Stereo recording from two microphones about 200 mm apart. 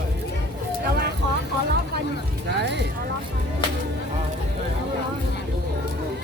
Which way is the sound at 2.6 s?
60° right (ahead or behind).